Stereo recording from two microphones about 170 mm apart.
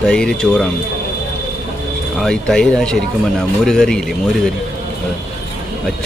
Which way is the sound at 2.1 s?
5° left (ahead or behind).